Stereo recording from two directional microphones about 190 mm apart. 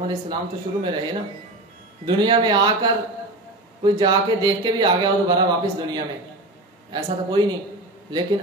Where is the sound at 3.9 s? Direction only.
25° right (ahead or behind).